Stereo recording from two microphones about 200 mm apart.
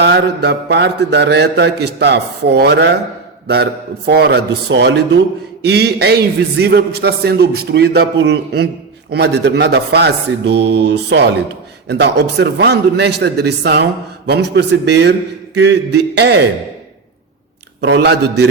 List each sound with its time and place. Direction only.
0.0 s a man's voice: 55° right (ahead or behind)
17.7 s a man's voice: 55° right (ahead or behind)